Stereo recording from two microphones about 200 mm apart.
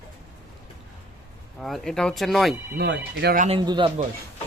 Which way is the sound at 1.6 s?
Centre (ahead or behind).